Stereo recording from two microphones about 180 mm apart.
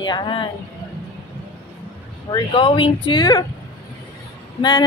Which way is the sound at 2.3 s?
25° left (ahead or behind).